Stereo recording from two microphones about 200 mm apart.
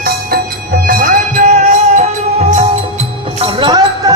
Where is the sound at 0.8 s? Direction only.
45° right (ahead or behind).